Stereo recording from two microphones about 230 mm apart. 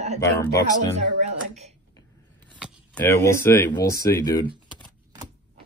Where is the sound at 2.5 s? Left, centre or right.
Centre.